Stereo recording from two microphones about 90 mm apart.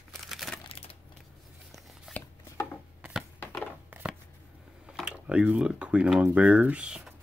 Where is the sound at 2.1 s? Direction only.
20° left (ahead or behind).